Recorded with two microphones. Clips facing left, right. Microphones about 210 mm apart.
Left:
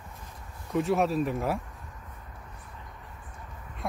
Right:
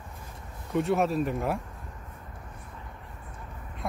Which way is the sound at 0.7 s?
Centre (ahead or behind).